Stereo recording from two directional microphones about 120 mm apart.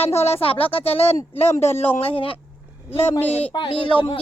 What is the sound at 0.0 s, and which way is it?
Speech, 60° left (ahead or behind).